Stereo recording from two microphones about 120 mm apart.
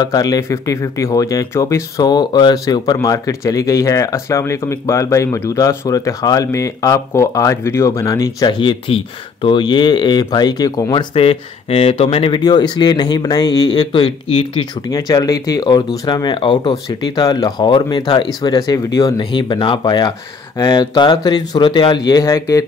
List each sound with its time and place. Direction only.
0.0 s speech: 30° left (ahead or behind)
8.5 s speech: 40° left (ahead or behind)
11.1 s speech: 55° left (ahead or behind)
12.4 s speech: 35° left (ahead or behind)
14.2 s speech: 50° left (ahead or behind)
14.9 s speech: 30° left (ahead or behind)
19.3 s speech: 45° left (ahead or behind); by 22.7 s 25° left (ahead or behind)